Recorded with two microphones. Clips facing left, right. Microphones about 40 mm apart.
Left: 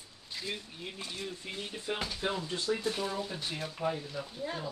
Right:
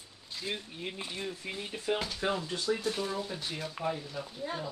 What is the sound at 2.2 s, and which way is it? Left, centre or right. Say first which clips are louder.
Speech: right 2 dB; right.